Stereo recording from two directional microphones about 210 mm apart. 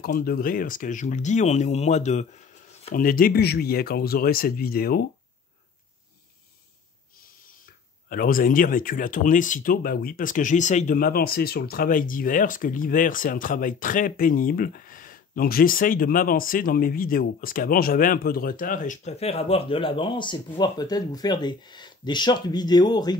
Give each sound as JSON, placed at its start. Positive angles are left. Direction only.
{"t": 0.0, "sound": "speech", "side_deg": 45}
{"t": 7.6, "sound": "speech", "side_deg": 45}